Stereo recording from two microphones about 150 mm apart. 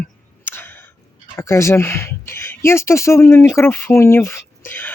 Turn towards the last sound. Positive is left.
turn(degrees=15)  # may be behind; listen again after turning